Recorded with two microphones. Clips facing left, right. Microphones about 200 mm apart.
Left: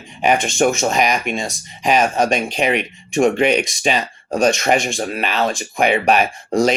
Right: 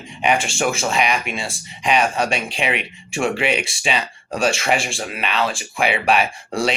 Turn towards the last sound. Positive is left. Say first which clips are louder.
# left 5 dB
turn(degrees=40)  # may be behind; listen again after turning